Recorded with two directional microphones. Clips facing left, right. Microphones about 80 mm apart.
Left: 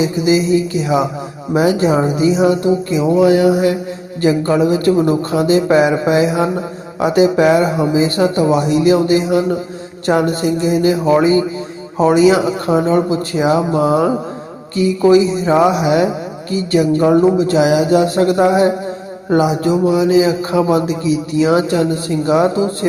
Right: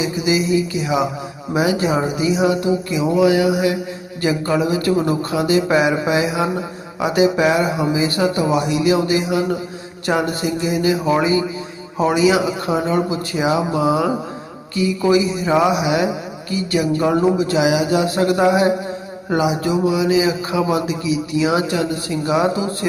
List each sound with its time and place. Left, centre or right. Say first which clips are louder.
0.0 s music: left 5 dB; left
1.5 s speech: left 5 dB; left
14.8 s speech: left 5 dB; left
19.3 s speech: left 4 dB; left